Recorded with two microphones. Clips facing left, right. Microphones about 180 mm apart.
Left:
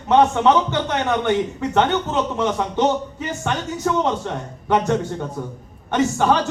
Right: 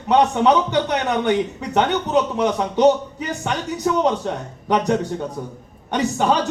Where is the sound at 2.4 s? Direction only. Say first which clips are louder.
Right 3 dB; 15° right (ahead or behind).